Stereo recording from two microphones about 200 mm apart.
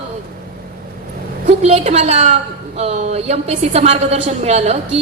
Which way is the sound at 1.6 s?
35° right (ahead or behind).